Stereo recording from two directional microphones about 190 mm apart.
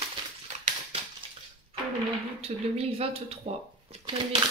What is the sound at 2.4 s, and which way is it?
Dishes, 30° right (ahead or behind).